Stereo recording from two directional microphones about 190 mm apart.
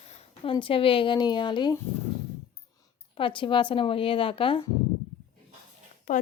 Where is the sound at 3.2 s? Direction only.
25° left (ahead or behind).